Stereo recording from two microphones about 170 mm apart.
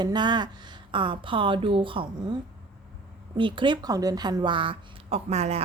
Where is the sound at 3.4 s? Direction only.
30° right (ahead or behind).